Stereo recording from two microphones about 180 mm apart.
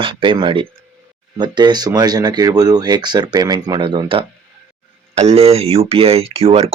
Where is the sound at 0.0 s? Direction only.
30° right (ahead or behind).